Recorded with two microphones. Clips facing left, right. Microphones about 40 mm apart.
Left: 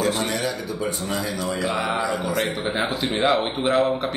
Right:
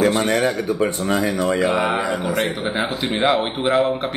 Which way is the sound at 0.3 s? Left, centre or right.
Right.